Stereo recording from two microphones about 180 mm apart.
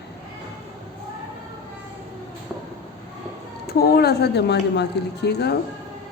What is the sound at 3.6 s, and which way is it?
Speech, 60° left (ahead or behind).